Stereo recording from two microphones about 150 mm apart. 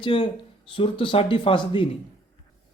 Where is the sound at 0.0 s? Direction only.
35° left (ahead or behind).